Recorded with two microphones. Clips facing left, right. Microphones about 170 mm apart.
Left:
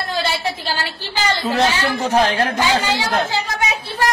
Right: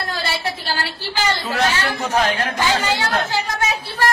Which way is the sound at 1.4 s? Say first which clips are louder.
Left 3 dB; 35° left (ahead or behind).